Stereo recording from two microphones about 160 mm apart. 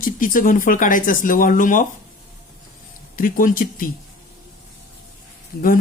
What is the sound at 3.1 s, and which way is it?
Speech, 60° left (ahead or behind).